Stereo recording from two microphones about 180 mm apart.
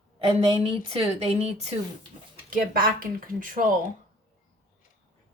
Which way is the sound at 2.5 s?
50° right (ahead or behind).